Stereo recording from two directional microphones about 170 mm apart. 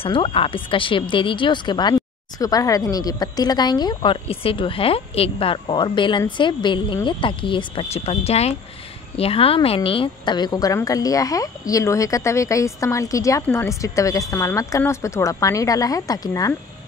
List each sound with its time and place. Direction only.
0.0 s a woman's voice: 30° left (ahead or behind)